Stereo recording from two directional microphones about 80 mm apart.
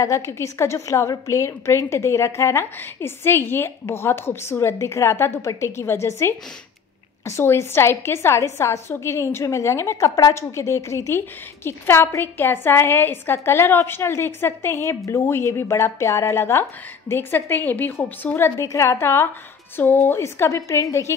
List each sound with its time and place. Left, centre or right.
0.0 s a woman's voice: left
18.6 s a woman's voice: left